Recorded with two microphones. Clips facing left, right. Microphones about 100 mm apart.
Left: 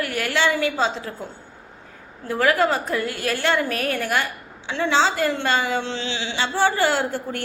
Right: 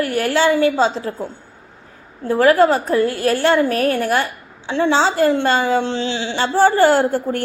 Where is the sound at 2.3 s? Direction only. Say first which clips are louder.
Right 7 dB; 35° right (ahead or behind).